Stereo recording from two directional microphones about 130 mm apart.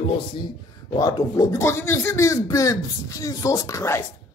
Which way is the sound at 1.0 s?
25° left (ahead or behind).